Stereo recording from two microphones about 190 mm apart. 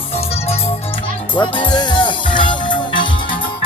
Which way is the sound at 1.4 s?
25° left (ahead or behind).